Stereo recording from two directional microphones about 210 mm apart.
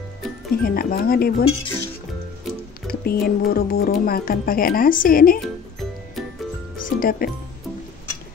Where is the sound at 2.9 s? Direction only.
45° left (ahead or behind).